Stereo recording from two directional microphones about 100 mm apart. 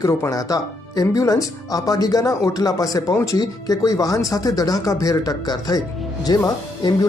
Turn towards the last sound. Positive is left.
turn(degrees=40)  # may be behind; listen again after turning